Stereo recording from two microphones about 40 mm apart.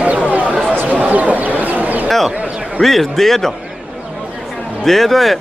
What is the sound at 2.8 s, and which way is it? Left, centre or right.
Speech, centre.